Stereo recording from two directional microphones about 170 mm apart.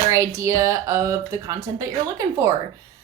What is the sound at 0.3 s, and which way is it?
Speech, 20° right (ahead or behind).